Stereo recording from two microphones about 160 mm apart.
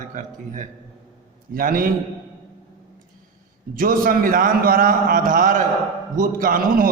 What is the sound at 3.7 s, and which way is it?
A man's voice, 65° right (ahead or behind).